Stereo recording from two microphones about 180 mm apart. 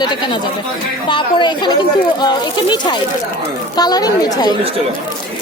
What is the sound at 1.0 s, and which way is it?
Speech, 25° left (ahead or behind).